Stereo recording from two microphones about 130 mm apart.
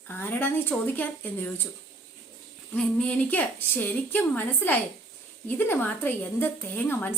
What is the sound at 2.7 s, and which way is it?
A woman's voice, 10° left (ahead or behind).